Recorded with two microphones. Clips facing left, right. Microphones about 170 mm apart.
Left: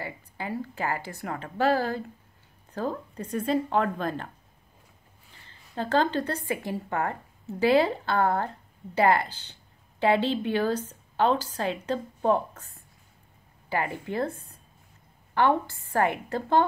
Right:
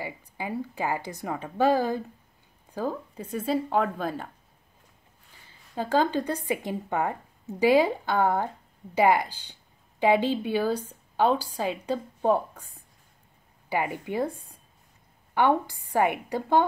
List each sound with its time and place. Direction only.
0.0 s speech: 15° right (ahead or behind)
5.5 s a woman's voice: 10° right (ahead or behind)